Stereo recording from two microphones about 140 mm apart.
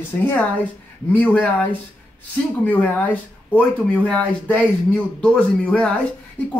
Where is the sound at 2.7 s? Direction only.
10° left (ahead or behind).